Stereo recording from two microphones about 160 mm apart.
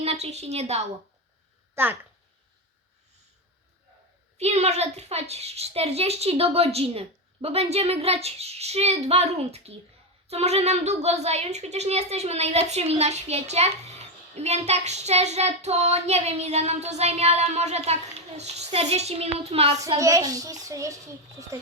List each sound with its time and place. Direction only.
0.0 s a child's voice: 40° right (ahead or behind)
1.7 s speech: 15° right (ahead or behind)
4.4 s a child's voice: 45° right (ahead or behind)
20.0 s a child's voice: 20° right (ahead or behind)